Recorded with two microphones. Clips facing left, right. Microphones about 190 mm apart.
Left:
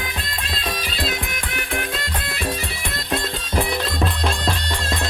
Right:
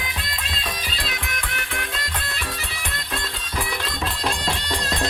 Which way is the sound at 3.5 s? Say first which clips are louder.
Left 6 dB; 30° left (ahead or behind).